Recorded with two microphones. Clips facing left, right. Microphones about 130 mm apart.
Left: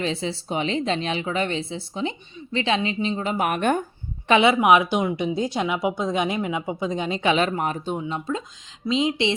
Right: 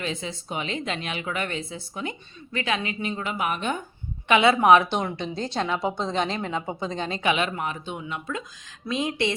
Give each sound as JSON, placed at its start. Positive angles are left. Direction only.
{"t": 0.0, "sound": "speech", "side_deg": 30}
{"t": 3.3, "sound": "speech", "side_deg": 50}
{"t": 4.3, "sound": "speech", "side_deg": 25}
{"t": 4.6, "sound": "speech", "side_deg": 10}
{"t": 7.2, "sound": "speech", "side_deg": 30}
{"t": 8.0, "sound": "speech", "side_deg": 30}